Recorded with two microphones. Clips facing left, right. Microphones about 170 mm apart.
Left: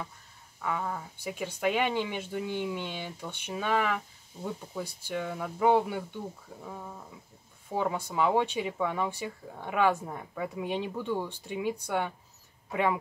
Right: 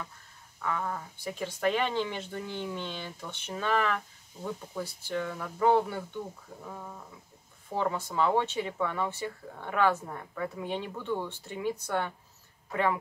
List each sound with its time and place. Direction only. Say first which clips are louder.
0.6 s speech: even; 15° left (ahead or behind)